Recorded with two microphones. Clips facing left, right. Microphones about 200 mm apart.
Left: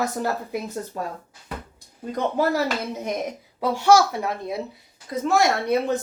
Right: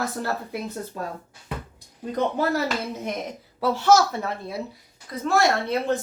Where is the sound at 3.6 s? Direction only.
15° left (ahead or behind).